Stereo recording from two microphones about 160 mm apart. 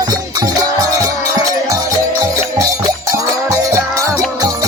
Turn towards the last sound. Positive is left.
turn(degrees=-20)  # may be behind; listen again after turning